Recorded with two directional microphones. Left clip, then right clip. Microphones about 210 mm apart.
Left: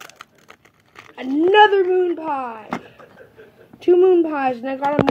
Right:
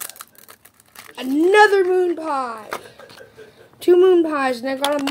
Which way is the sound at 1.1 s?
20° right (ahead or behind).